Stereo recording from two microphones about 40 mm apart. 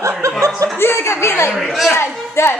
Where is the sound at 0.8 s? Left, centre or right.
Left.